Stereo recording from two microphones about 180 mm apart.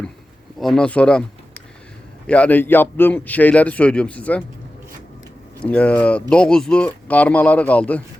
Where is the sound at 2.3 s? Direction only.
5° left (ahead or behind).